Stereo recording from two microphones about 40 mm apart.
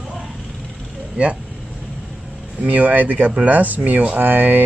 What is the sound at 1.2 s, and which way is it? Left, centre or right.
Speech, right.